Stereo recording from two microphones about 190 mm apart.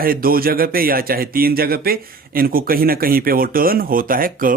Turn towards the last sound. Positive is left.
turn(degrees=-45)  # may be behind; listen again after turning